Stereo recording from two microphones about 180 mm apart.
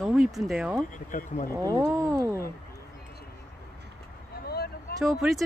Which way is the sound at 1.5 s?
20° right (ahead or behind).